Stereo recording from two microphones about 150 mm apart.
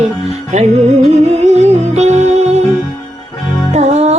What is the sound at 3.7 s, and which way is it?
Music, 45° right (ahead or behind).